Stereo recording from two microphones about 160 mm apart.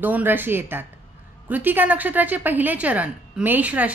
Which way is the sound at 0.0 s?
10° right (ahead or behind).